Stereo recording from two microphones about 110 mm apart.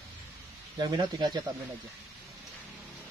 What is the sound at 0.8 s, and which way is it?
Speech, 40° right (ahead or behind).